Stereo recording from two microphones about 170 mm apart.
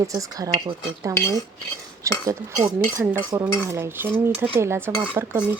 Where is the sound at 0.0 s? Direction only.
20° right (ahead or behind).